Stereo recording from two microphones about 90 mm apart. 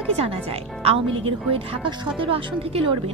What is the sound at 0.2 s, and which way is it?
A woman's voice, 90° right.